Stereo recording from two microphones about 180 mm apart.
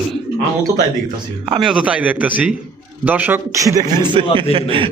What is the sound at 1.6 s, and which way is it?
A man's voice, 5° right (ahead or behind).